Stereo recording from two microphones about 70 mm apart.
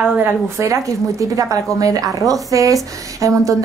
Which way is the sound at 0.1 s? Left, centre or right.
Right.